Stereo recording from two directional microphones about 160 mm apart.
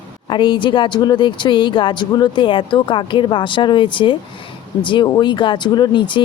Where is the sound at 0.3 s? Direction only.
30° left (ahead or behind).